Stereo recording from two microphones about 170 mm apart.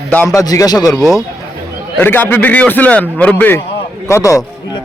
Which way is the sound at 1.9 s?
10° left (ahead or behind).